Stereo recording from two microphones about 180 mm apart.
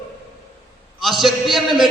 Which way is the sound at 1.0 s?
Centre (ahead or behind).